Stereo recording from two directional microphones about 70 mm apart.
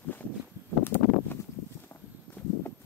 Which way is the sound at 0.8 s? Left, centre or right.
Left.